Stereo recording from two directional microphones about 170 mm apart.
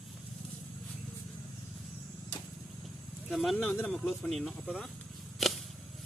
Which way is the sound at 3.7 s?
10° left (ahead or behind).